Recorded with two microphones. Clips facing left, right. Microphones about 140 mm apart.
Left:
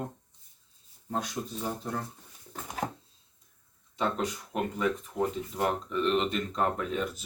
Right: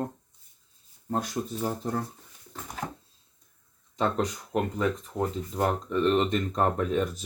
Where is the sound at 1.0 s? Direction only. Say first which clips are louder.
Right 3 dB; 45° right (ahead or behind).